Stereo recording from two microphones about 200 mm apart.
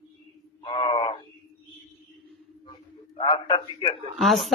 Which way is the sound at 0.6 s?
25° left (ahead or behind).